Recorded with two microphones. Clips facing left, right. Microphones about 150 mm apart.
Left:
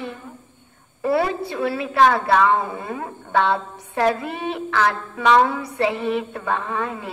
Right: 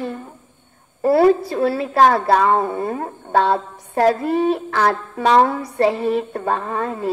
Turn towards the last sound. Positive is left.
turn(degrees=-40)  # may be behind; listen again after turning